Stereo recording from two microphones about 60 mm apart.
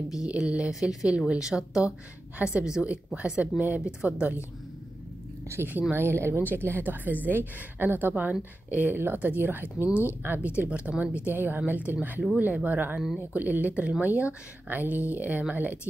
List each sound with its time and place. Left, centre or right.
0.3 s a woman's voice: centre
5.9 s speech: right
10.7 s speech: right